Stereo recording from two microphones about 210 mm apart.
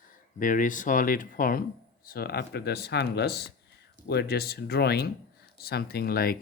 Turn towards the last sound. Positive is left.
turn(degrees=45)  # may be behind; listen again after turning